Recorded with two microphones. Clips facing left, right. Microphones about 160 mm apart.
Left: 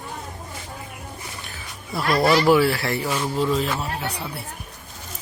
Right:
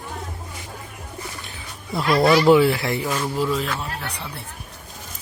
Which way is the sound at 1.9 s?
20° right (ahead or behind).